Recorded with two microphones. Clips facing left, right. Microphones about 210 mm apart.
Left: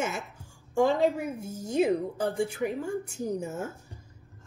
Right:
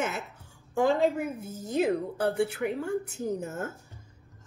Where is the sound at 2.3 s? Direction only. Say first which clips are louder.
Right 5 dB; 70° right (ahead or behind).